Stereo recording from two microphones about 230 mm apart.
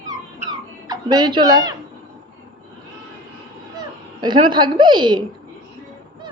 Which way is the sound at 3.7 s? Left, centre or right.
Centre.